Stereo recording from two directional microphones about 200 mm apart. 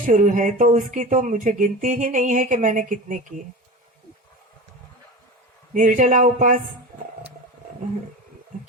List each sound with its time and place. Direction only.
0.0 s speech: 40° right (ahead or behind)
5.7 s speech: 40° right (ahead or behind)